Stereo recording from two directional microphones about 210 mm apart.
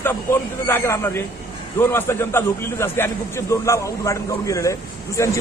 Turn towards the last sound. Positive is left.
turn(degrees=15)  # may be behind; listen again after turning